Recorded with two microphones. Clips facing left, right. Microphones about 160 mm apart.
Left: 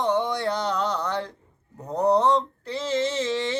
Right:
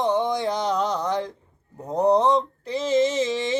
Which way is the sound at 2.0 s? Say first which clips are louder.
Right 1 dB; 15° right (ahead or behind).